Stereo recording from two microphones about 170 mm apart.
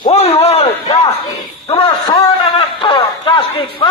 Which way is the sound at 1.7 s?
30° left (ahead or behind).